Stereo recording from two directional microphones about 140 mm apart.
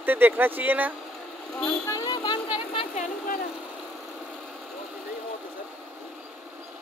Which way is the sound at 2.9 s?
60° left (ahead or behind).